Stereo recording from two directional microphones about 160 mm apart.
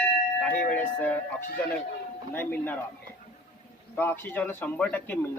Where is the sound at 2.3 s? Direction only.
10° left (ahead or behind).